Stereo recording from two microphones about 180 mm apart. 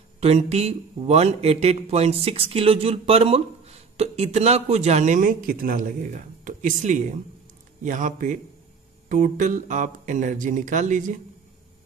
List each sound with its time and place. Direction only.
0.2 s a man's voice: 35° right (ahead or behind)